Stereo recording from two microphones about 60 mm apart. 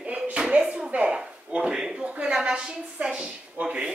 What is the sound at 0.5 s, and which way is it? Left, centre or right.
A woman's voice, centre.